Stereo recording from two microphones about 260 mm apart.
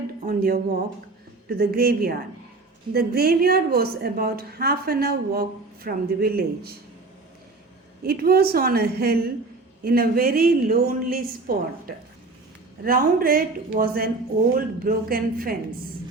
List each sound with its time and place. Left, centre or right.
0.3 s a woman's voice: right
8.0 s a woman's voice: right